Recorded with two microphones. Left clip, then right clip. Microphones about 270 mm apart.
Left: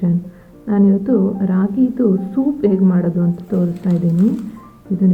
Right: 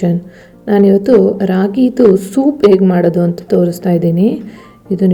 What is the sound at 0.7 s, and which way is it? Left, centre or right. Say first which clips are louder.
A woman's voice: right 8 dB; centre.